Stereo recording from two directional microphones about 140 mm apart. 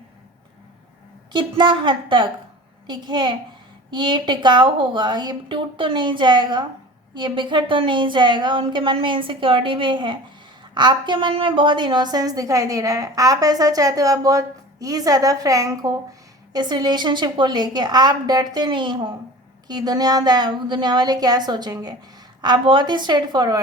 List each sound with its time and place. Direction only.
1.3 s a woman's voice: 35° right (ahead or behind)